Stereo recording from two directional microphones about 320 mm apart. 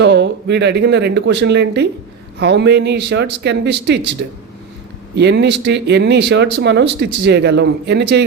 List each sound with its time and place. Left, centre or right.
0.0 s speech: right
5.1 s speech: right